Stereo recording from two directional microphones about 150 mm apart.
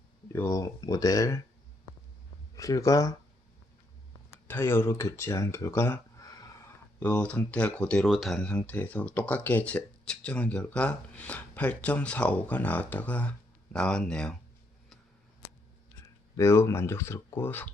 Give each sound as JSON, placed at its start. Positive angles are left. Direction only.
{"t": 0.3, "sound": "speech", "side_deg": 20}
{"t": 2.6, "sound": "speech", "side_deg": 25}
{"t": 4.4, "sound": "speech", "side_deg": 15}
{"t": 7.0, "sound": "speech", "side_deg": 10}
{"t": 16.4, "sound": "speech", "side_deg": 20}